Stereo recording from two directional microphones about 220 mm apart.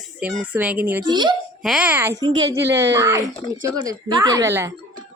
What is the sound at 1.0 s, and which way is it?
Speech, 20° right (ahead or behind).